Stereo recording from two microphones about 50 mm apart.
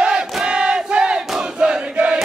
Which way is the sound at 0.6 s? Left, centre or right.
Centre.